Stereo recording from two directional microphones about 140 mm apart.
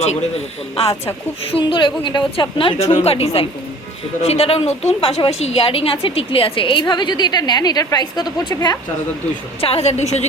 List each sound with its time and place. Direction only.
1.5 s a woman's voice: 35° left (ahead or behind)
9.6 s a woman's voice: 45° left (ahead or behind)